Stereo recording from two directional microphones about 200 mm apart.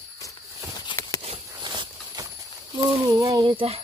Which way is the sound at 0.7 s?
20° left (ahead or behind).